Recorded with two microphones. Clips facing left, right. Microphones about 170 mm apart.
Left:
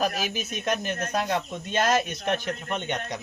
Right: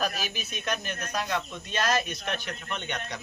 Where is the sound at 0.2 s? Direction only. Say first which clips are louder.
Left 5 dB; 20° left (ahead or behind).